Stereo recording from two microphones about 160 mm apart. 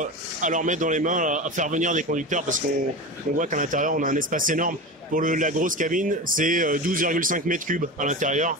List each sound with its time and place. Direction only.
0.0 s a man's voice: 50° right (ahead or behind)